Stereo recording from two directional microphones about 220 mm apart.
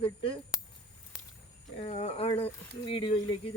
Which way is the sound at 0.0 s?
25° left (ahead or behind).